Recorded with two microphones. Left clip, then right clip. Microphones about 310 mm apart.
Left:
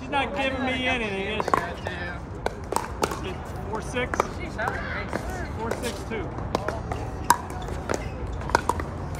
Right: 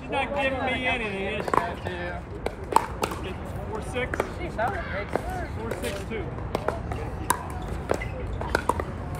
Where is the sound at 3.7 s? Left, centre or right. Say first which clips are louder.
Left 3 dB; left.